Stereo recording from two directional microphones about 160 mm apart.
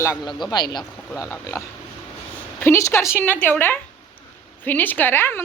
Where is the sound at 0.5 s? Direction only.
25° left (ahead or behind).